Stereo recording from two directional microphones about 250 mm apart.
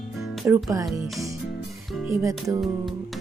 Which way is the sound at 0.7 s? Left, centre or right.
Centre.